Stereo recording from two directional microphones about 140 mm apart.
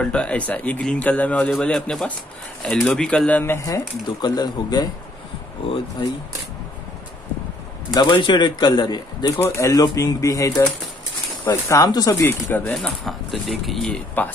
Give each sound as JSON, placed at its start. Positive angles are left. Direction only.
{"t": 0.0, "sound": "speech", "side_deg": 10}
{"t": 7.9, "sound": "speech", "side_deg": 35}
{"t": 12.7, "sound": "speech", "side_deg": 0}
{"t": 14.2, "sound": "speech", "side_deg": 10}